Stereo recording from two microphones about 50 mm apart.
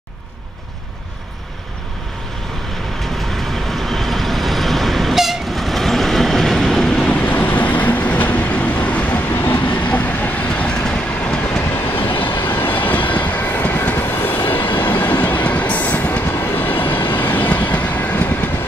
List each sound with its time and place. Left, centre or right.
3.7 s vehicle: centre
7.1 s vehicle: left
10.5 s train: centre
11.7 s train: left
16.3 s train: left